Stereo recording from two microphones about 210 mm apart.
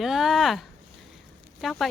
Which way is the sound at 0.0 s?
Centre (ahead or behind).